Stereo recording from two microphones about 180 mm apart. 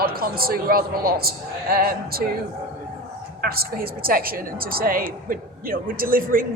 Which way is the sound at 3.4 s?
55° right (ahead or behind).